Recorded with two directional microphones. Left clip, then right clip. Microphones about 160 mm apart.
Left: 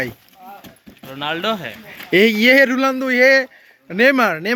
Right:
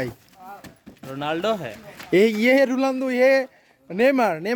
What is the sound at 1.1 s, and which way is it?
Speech, 55° right (ahead or behind).